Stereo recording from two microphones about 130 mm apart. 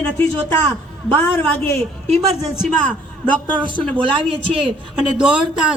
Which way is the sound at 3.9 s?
40° right (ahead or behind).